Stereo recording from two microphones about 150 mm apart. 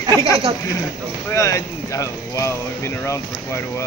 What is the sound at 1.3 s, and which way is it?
Speech, 20° left (ahead or behind).